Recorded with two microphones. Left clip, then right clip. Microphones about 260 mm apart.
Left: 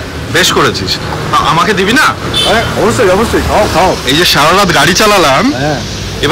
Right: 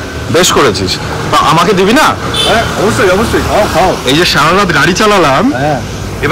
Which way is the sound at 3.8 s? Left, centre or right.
Centre.